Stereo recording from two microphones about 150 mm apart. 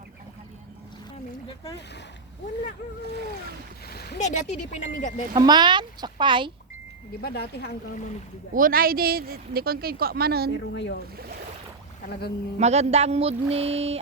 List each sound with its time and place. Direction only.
3.8 s a sound: 90° left
4.2 s speech: 50° left (ahead or behind)
5.3 s speech: 30° right (ahead or behind)
7.2 s speech: 90° left
8.5 s a woman's voice: 70° right (ahead or behind); by 10.5 s 90° right
12.5 s speech: 45° right (ahead or behind)